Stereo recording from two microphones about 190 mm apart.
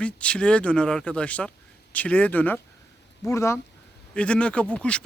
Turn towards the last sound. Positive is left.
turn(degrees=5)  # may be behind; listen again after turning